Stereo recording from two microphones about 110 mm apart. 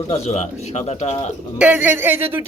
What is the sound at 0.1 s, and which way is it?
Speech, 85° left.